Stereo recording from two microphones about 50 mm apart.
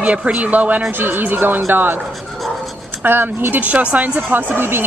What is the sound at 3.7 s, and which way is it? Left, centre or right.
Speech, right.